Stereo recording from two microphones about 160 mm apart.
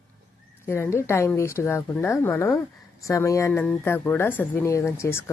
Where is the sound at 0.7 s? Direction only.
15° left (ahead or behind).